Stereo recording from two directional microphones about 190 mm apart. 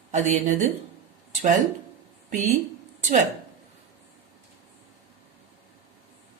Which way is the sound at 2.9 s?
40° right (ahead or behind).